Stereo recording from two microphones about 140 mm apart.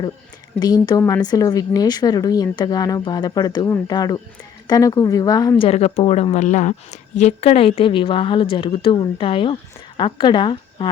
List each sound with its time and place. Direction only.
0.6 s speech: 30° left (ahead or behind)
5.5 s a woman's voice: 45° left (ahead or behind)